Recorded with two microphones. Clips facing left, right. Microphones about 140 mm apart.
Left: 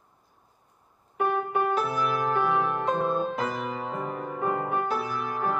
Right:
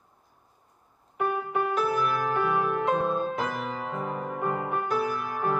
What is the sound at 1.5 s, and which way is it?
Music, centre (ahead or behind).